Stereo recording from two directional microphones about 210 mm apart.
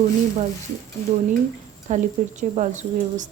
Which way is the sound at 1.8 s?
35° right (ahead or behind).